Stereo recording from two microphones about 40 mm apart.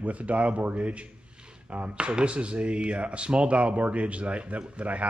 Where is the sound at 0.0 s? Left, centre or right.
Right.